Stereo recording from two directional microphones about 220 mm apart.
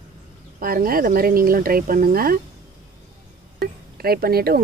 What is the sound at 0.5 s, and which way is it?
Speech, 40° right (ahead or behind).